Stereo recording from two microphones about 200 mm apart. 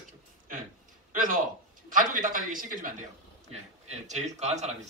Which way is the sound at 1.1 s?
40° right (ahead or behind).